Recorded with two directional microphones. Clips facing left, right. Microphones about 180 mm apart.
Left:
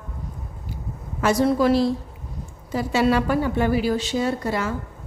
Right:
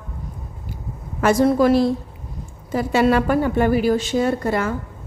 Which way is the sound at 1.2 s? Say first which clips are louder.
Right 3 dB; 50° right (ahead or behind).